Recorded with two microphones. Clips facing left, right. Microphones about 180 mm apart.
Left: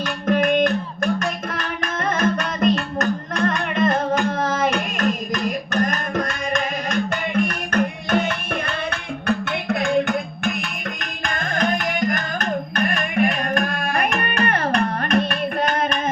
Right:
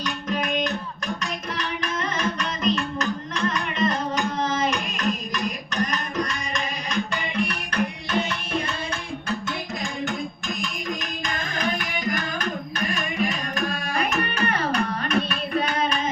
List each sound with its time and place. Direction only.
0.0 s music: 55° left (ahead or behind)